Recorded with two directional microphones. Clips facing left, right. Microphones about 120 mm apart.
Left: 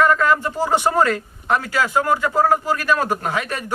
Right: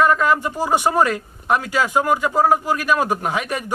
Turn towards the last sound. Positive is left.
turn(degrees=-15)  # may be behind; listen again after turning